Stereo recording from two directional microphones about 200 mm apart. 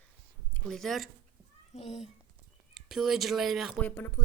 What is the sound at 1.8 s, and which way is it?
Speech, 30° left (ahead or behind).